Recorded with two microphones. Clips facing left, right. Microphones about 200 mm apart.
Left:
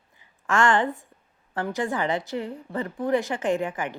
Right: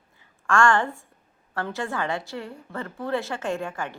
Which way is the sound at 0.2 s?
20° left (ahead or behind).